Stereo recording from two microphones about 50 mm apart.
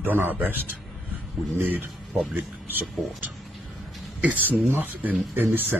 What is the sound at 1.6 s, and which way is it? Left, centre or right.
Speech, right.